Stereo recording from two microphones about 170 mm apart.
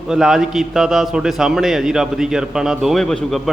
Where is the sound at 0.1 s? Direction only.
5° right (ahead or behind).